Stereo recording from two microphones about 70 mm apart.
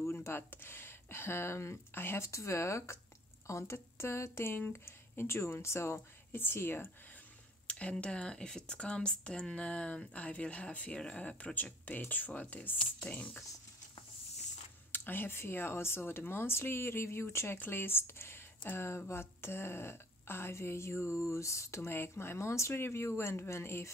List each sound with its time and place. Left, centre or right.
0.0 s speech: left
7.6 s speech: centre
14.9 s speech: left